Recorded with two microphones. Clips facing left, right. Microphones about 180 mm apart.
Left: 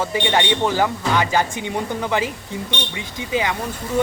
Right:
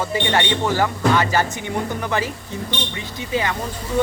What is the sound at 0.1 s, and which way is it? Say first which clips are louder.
Speech: left 1 dB; 20° left (ahead or behind).